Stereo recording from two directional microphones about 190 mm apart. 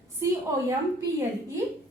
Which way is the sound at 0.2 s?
15° right (ahead or behind).